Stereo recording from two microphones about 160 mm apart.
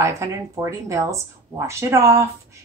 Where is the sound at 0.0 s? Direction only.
20° right (ahead or behind).